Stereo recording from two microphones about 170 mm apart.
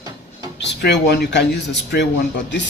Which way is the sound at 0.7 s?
85° left.